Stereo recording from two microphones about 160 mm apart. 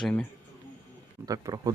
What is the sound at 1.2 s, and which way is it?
Speech, 20° right (ahead or behind).